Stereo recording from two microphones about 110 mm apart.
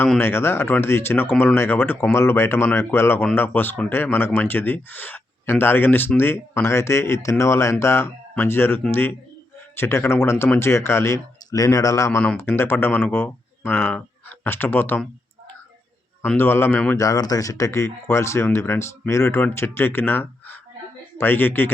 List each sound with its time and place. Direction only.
0.2 s speech: 20° left (ahead or behind)
16.4 s speech: 20° left (ahead or behind)
17.0 s speech: 35° left (ahead or behind); by 21.7 s 20° left (ahead or behind)